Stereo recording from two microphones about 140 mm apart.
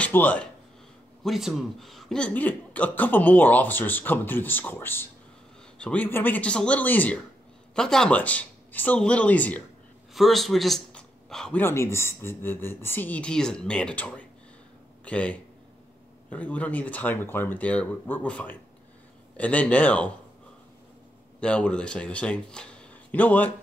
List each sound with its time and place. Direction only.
0.0 s speech: 10° left (ahead or behind)
1.2 s speech: centre (ahead or behind)
10.1 s a man's voice: centre (ahead or behind)
11.6 s speech: 20° left (ahead or behind)
21.4 s speech: 10° left (ahead or behind)